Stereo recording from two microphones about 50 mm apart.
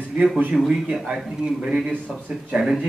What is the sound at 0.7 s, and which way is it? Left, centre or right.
Speech, centre.